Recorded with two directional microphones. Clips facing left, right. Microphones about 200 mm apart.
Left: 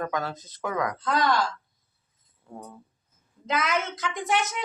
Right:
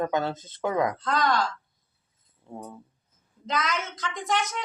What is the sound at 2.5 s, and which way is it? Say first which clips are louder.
Speech: right 2 dB; 25° right (ahead or behind).